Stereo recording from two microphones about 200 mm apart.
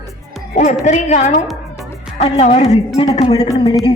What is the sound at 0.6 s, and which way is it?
A woman's voice, 35° left (ahead or behind).